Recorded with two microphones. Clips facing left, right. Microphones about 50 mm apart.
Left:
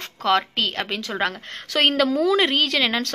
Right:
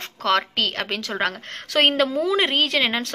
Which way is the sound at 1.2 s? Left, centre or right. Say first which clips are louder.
Even; right.